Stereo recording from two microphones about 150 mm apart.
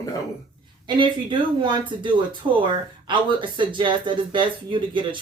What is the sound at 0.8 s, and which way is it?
Speech, 30° right (ahead or behind).